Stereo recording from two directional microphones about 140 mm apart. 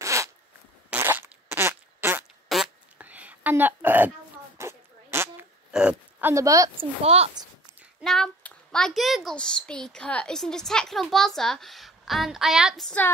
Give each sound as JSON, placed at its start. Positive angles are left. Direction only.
{"t": 0.0, "sound": "zipper", "side_deg": -20}
{"t": 0.8, "sound": "fart", "side_deg": -15}
{"t": 2.4, "sound": "a sound", "side_deg": 0}
{"t": 5.7, "sound": "a sound", "side_deg": -5}
{"t": 6.3, "sound": "a woman's voice", "side_deg": -25}
{"t": 6.8, "sound": "speech", "side_deg": -45}
{"t": 8.0, "sound": "a woman's voice", "side_deg": 5}